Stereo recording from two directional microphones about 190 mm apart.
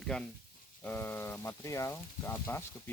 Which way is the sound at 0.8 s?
10° left (ahead or behind).